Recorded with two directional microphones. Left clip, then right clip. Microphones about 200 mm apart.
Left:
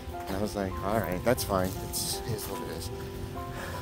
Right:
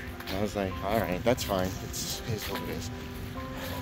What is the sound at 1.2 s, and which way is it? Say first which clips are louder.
Speech: even; 20° left (ahead or behind).